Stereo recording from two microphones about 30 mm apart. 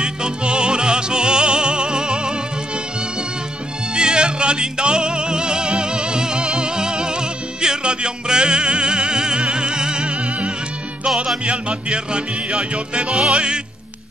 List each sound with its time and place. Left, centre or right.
0.0 s music: right
3.9 s music: right
13.1 s music: right